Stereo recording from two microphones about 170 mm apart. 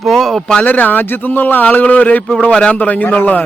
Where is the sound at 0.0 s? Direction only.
Centre (ahead or behind).